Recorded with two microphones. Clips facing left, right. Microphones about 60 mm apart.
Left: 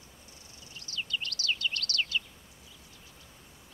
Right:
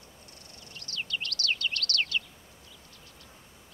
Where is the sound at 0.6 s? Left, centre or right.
Right.